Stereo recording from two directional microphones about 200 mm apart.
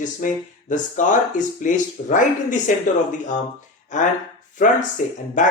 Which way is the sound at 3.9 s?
40° left (ahead or behind).